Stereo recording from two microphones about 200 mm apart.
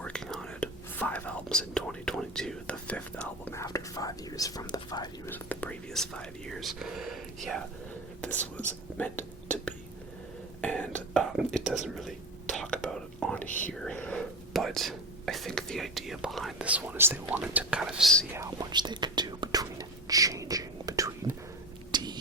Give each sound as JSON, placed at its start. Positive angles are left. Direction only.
{"t": 0.0, "sound": "speech", "side_deg": 5}
{"t": 9.0, "sound": "whispering", "side_deg": 10}
{"t": 18.3, "sound": "whispering", "side_deg": -20}
{"t": 21.9, "sound": "a sound", "side_deg": -20}